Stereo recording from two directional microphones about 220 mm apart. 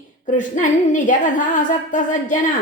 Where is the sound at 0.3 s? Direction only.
35° left (ahead or behind).